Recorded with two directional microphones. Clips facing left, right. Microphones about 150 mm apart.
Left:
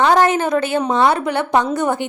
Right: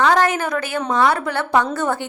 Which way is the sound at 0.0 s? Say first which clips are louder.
Left 3 dB; 25° left (ahead or behind).